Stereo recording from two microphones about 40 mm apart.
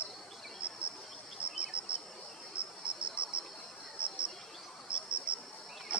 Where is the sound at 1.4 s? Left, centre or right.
Right.